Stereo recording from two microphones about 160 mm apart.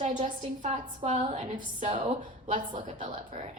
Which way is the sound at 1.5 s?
35° right (ahead or behind).